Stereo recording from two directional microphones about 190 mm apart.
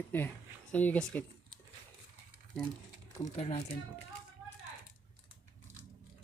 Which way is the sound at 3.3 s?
35° left (ahead or behind).